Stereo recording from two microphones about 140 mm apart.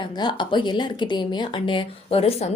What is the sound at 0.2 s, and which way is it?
Speech, 35° left (ahead or behind).